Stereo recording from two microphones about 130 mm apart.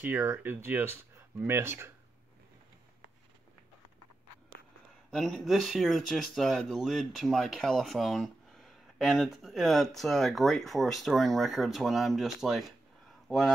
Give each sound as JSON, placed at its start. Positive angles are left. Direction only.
{"t": 0.0, "sound": "speech", "side_deg": -15}
{"t": 5.1, "sound": "speech", "side_deg": 0}